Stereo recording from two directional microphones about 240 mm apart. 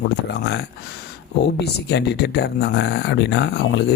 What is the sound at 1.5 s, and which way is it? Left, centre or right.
Speech, left.